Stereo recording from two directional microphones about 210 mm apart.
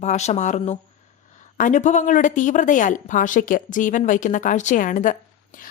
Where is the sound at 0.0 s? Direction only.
35° left (ahead or behind).